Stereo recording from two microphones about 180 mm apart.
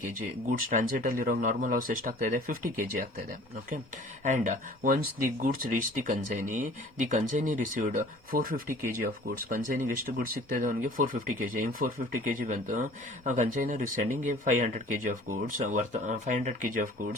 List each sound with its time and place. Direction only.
0.7 s speech: 50° right (ahead or behind)